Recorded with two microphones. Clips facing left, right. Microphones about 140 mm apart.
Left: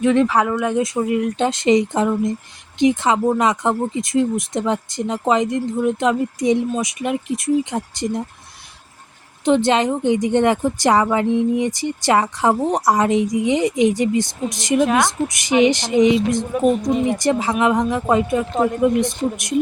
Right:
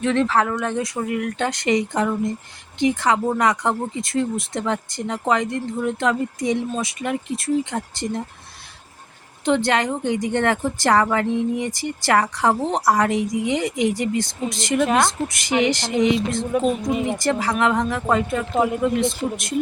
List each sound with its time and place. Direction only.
0.0 s speech: 10° left (ahead or behind)
0.8 s speech: 20° left (ahead or behind)
9.4 s speech: 20° left (ahead or behind)
18.5 s speech: 10° right (ahead or behind)
18.8 s speech: 20° left (ahead or behind)